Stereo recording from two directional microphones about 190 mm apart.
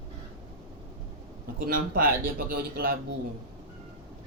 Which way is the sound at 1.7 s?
50° right (ahead or behind).